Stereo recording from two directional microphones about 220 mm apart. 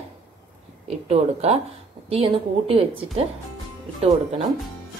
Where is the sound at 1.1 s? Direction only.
30° right (ahead or behind).